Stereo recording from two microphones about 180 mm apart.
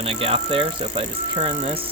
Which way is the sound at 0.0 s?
30° right (ahead or behind).